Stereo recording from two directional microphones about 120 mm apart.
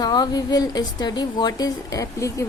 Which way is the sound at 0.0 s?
35° left (ahead or behind).